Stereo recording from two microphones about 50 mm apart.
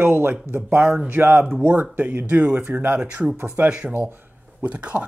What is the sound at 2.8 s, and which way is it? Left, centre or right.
Speech, right.